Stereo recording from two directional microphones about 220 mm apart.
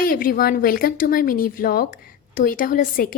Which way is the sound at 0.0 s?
40° left (ahead or behind).